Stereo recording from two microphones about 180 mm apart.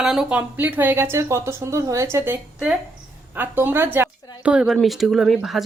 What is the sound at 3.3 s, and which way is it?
A woman's voice, 10° right (ahead or behind).